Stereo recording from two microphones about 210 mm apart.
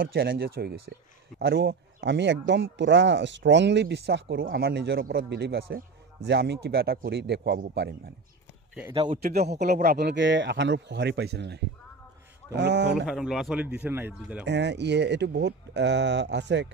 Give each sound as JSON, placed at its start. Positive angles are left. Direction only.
{"t": 0.0, "sound": "speech", "side_deg": -45}
{"t": 9.1, "sound": "speech", "side_deg": -45}
{"t": 13.0, "sound": "speech", "side_deg": 0}
{"t": 14.4, "sound": "speech", "side_deg": -55}